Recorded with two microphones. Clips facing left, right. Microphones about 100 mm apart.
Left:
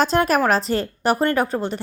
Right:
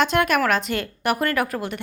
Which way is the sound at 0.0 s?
35° left (ahead or behind).